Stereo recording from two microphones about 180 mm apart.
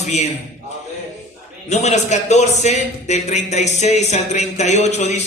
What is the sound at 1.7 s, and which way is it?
A man's voice, 40° left (ahead or behind).